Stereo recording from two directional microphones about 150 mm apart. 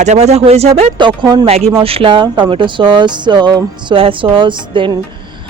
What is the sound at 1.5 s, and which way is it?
Speech, 45° right (ahead or behind).